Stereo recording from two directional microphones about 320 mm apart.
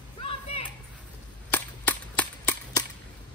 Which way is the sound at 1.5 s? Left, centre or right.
Centre.